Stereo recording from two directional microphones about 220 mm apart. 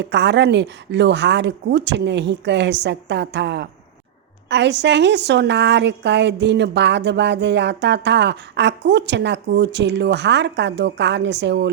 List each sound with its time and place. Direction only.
0.0 s a woman's voice: 50° right (ahead or behind)